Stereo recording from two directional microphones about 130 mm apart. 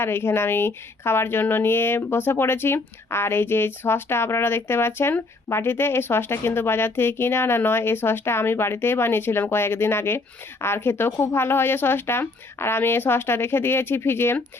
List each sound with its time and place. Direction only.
0.0 s speech: 20° left (ahead or behind)